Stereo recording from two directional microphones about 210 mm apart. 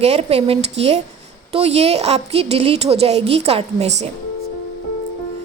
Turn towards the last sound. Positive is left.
turn(degrees=-30)  # may be behind; listen again after turning